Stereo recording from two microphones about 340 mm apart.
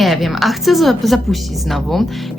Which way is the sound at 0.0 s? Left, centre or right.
Centre.